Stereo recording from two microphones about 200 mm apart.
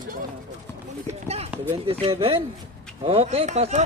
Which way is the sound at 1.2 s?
30° right (ahead or behind).